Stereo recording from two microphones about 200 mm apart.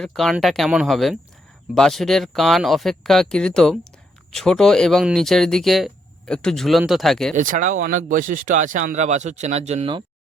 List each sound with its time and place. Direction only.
0.0 s speech: centre (ahead or behind)
7.3 s speech: 40° right (ahead or behind)